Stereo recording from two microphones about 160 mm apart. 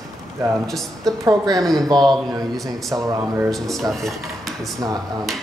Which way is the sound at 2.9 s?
20° right (ahead or behind).